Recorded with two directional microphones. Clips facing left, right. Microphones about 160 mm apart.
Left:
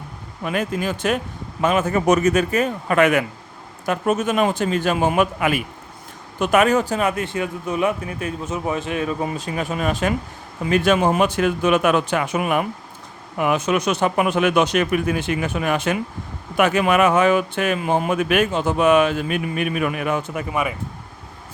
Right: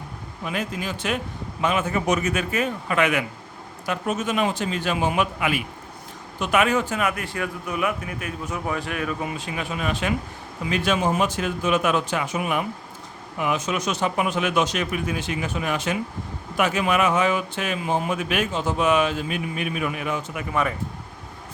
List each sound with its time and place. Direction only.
0.4 s a man's voice: 50° left (ahead or behind)
20.5 s speech: 10° left (ahead or behind)